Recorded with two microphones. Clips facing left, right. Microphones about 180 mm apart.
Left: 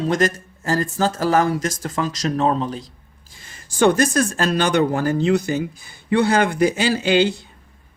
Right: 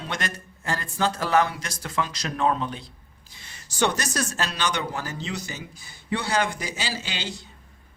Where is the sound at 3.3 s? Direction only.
45° left (ahead or behind).